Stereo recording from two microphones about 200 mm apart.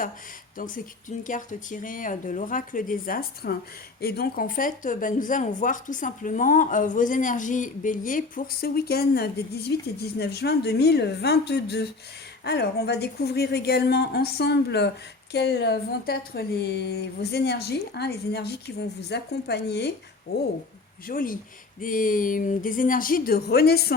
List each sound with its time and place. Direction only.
0.5 s a woman's voice: 40° left (ahead or behind)
21.1 s a woman's voice: 45° left (ahead or behind)